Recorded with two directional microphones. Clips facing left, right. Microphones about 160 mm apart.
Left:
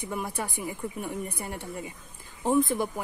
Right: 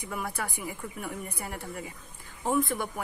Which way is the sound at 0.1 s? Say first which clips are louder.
Left 1 dB; 20° left (ahead or behind).